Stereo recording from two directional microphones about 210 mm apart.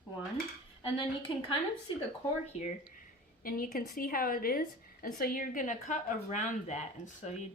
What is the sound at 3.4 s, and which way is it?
A woman's voice, 45° left (ahead or behind).